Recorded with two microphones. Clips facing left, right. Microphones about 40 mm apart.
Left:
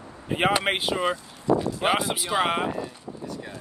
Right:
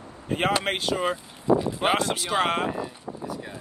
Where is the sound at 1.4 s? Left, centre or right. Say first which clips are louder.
Right 1 dB; right.